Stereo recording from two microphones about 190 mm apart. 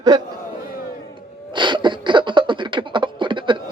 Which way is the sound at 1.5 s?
25° right (ahead or behind).